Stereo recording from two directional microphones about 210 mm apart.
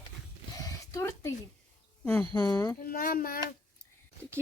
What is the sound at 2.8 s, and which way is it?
Speech, 40° left (ahead or behind).